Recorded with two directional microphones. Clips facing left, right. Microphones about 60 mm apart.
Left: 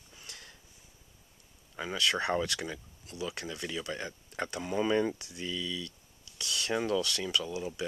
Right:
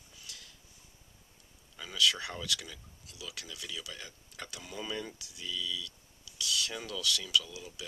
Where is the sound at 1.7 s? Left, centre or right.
Left.